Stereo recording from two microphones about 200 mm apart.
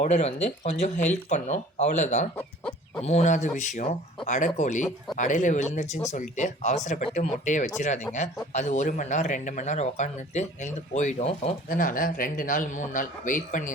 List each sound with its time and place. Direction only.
0.0 s speech: 35° left (ahead or behind)
2.3 s chicken: 5° left (ahead or behind)
3.0 s speech: 35° left (ahead or behind)